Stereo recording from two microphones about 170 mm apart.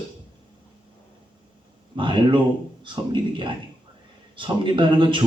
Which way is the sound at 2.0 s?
30° right (ahead or behind).